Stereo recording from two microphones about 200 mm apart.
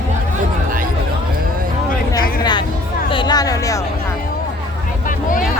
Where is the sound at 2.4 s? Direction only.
20° left (ahead or behind).